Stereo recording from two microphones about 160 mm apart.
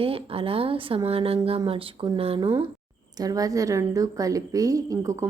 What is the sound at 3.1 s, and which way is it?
A woman's voice, 20° right (ahead or behind).